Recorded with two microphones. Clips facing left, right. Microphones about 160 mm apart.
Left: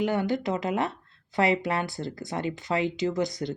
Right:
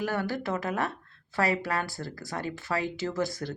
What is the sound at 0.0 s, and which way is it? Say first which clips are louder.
Speech: left 4 dB; 20° left (ahead or behind).